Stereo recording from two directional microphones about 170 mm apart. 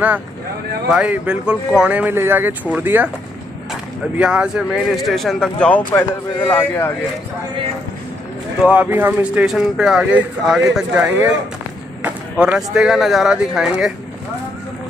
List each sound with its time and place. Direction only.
0.8 s speech: 5° right (ahead or behind)
4.2 s speech: 5° right (ahead or behind); by 6.9 s 10° left (ahead or behind)
8.6 s speech: 10° right (ahead or behind)
11.0 s speech: 15° right (ahead or behind)